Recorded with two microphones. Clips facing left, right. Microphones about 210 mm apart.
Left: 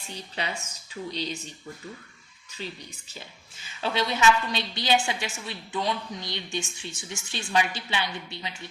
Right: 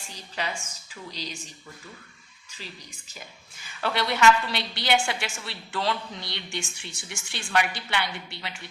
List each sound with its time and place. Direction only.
0.1 s speech: 35° left (ahead or behind)
3.8 s a woman's voice: 20° left (ahead or behind)